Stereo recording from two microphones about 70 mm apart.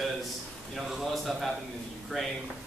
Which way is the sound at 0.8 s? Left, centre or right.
Centre.